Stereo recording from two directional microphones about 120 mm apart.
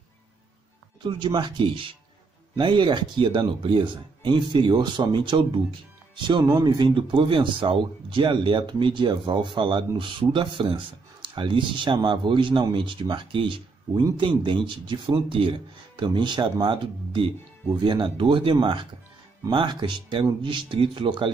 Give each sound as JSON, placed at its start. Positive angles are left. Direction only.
{"t": 1.0, "sound": "speech", "side_deg": -40}